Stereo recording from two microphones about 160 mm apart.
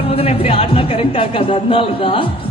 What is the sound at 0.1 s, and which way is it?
A man's voice, 35° left (ahead or behind).